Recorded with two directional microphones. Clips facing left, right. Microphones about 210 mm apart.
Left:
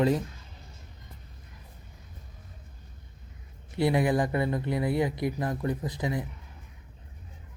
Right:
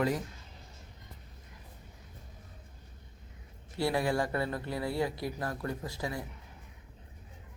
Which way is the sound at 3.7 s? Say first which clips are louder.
Left 5 dB; 20° left (ahead or behind).